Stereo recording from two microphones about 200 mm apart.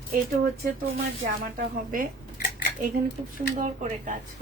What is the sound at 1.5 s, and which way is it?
Speech, 45° right (ahead or behind).